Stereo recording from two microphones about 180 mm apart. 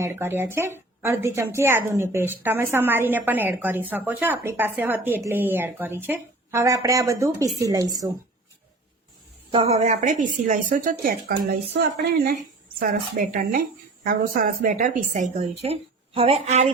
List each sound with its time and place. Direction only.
0.0 s a woman's voice: 15° right (ahead or behind)
9.5 s a woman's voice: 35° right (ahead or behind)